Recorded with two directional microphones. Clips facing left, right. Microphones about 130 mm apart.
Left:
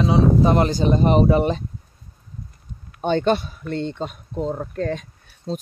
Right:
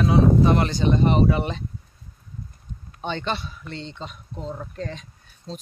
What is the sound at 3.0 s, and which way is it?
Speech, 50° left (ahead or behind).